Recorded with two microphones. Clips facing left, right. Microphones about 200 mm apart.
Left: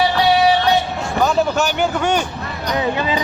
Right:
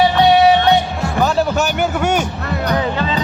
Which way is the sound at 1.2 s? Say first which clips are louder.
Even; centre (ahead or behind).